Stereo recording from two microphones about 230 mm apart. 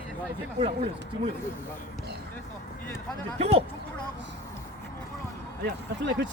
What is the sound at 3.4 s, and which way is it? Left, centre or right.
Speech, right.